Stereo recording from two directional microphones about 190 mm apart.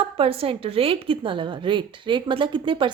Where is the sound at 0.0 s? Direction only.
30° right (ahead or behind).